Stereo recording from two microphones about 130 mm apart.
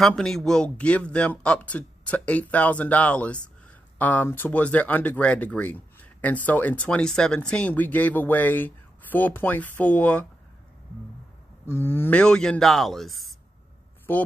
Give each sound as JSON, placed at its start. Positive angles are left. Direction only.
{"t": 0.0, "sound": "speech", "side_deg": 5}
{"t": 11.6, "sound": "speech", "side_deg": 20}
{"t": 14.1, "sound": "speech", "side_deg": 15}